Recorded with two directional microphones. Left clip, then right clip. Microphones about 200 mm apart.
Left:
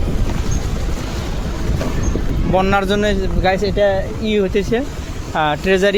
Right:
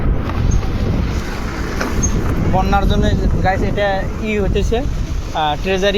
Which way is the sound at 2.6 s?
40° left (ahead or behind).